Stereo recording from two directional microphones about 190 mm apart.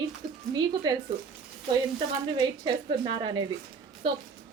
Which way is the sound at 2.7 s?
25° right (ahead or behind).